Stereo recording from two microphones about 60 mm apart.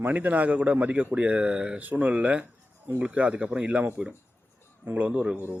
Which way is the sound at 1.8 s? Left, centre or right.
Right.